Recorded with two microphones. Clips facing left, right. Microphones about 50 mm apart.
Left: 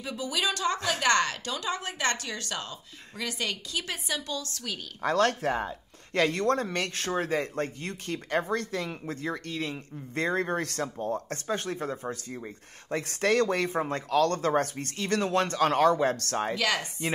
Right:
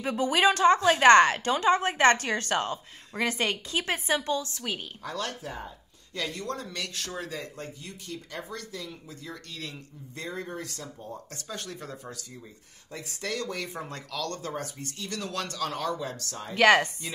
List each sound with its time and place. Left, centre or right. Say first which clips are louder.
0.0 s a woman's voice: right 7 dB; right
5.0 s speech: left 12 dB; left
6.1 s speech: left 9 dB; left
9.3 s speech: left 5 dB; left
10.1 s speech: left 8 dB; left
11.4 s speech: left 6 dB; left
12.9 s speech: left 9 dB; left
15.2 s speech: left 7 dB; left
16.5 s a woman's voice: right 9 dB; right